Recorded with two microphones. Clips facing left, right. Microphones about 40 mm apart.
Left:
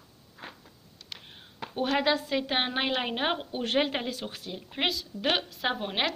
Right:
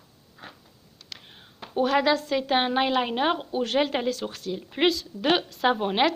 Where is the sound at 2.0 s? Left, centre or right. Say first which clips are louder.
Right 3 dB; centre.